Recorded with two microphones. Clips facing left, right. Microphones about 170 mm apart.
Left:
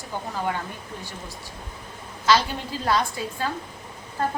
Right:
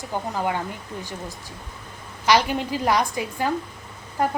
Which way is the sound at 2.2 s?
15° right (ahead or behind).